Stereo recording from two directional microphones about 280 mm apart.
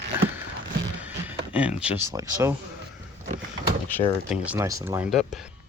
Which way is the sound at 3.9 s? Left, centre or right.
Centre.